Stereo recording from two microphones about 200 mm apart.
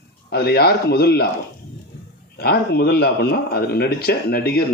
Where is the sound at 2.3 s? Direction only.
50° left (ahead or behind).